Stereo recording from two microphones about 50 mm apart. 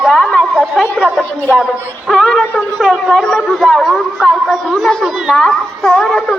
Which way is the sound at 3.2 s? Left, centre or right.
Centre.